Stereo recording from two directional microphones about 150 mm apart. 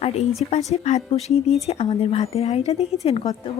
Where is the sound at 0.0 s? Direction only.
45° left (ahead or behind).